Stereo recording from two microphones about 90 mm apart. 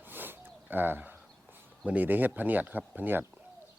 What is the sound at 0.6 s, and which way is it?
Speech, 20° right (ahead or behind).